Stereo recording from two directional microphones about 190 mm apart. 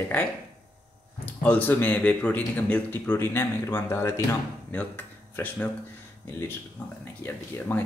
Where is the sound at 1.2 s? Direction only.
10° left (ahead or behind).